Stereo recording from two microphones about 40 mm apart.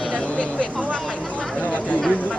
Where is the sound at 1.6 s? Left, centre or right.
Left.